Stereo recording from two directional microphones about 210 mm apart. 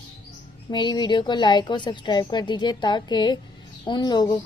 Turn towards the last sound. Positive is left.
turn(degrees=20)  # may be behind; listen again after turning